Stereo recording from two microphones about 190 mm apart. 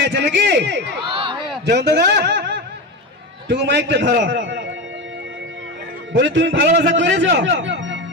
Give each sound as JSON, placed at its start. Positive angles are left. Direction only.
{"t": 0.0, "sound": "a man's voice", "side_deg": -60}
{"t": 1.1, "sound": "a sound", "side_deg": -25}
{"t": 1.7, "sound": "a man's voice", "side_deg": -60}
{"t": 6.1, "sound": "a man's voice", "side_deg": -70}